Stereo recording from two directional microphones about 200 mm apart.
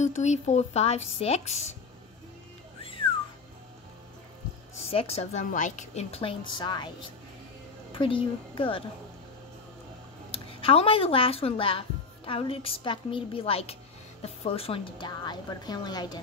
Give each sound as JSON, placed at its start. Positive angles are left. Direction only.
{"t": 0.0, "sound": "speech", "side_deg": 35}
{"t": 2.8, "sound": "music", "side_deg": 25}
{"t": 4.8, "sound": "a woman's voice", "side_deg": 30}
{"t": 10.3, "sound": "a woman's voice", "side_deg": 30}